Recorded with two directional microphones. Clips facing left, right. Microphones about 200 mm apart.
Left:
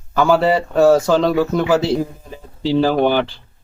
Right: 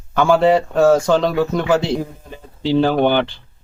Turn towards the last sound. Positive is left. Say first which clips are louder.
# even
turn(degrees=5)  # may be behind; listen again after turning